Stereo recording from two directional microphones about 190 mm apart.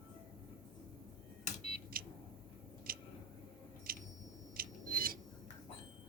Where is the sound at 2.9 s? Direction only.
50° right (ahead or behind).